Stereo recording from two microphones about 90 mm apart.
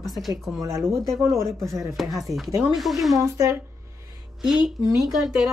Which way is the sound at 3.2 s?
35° right (ahead or behind).